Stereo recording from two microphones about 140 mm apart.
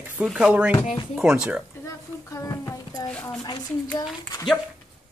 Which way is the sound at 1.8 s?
20° left (ahead or behind).